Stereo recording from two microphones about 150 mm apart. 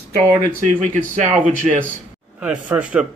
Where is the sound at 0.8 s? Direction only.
55° right (ahead or behind).